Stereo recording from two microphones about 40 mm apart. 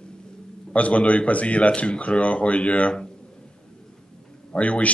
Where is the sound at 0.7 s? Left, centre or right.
Left.